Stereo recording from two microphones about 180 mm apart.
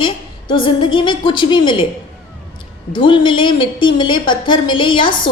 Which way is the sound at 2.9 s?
25° left (ahead or behind).